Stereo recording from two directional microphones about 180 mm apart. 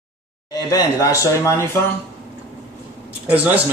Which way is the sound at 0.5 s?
20° left (ahead or behind).